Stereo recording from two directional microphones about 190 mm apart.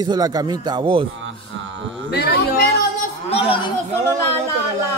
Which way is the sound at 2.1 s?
60° left (ahead or behind).